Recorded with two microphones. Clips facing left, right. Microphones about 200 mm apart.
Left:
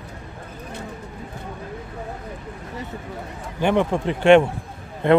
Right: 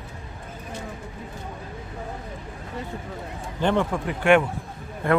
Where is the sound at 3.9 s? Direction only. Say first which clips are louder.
Left 7 dB; 25° left (ahead or behind).